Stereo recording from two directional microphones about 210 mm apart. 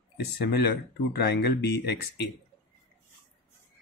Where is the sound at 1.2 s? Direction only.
50° left (ahead or behind).